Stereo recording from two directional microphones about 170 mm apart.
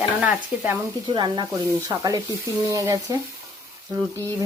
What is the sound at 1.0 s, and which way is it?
Speech, 25° right (ahead or behind).